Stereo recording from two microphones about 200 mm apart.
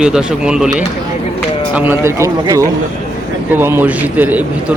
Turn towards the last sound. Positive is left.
turn(degrees=-10)  # may be behind; listen again after turning